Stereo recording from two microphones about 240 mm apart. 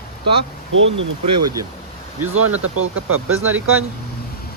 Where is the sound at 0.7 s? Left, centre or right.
Right.